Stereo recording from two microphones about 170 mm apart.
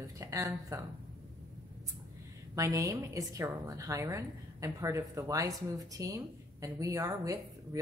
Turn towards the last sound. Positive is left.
turn(degrees=-20)  # may be behind; listen again after turning